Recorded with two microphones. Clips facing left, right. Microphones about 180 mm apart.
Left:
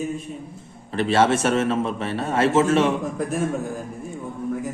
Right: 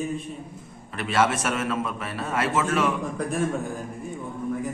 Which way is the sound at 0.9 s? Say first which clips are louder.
Left 5 dB; 30° left (ahead or behind).